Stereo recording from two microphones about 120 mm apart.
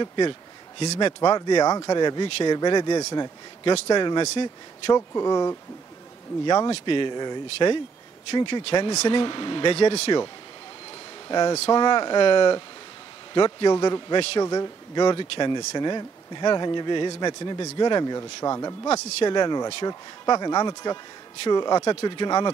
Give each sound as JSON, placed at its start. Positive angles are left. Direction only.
{"t": 0.0, "sound": "a sound", "side_deg": 40}
{"t": 0.9, "sound": "speech", "side_deg": 35}
{"t": 11.2, "sound": "speech", "side_deg": 35}
{"t": 18.9, "sound": "speech", "side_deg": 65}
{"t": 19.2, "sound": "speech", "side_deg": 35}